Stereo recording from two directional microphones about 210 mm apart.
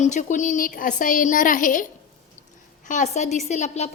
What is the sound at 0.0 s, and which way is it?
A woman's voice, 35° left (ahead or behind).